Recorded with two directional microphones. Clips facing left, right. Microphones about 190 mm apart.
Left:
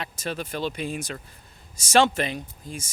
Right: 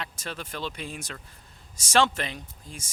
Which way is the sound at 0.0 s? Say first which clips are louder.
Left 5 dB; 10° left (ahead or behind).